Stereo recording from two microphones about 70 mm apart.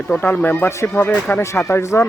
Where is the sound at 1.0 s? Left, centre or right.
Left.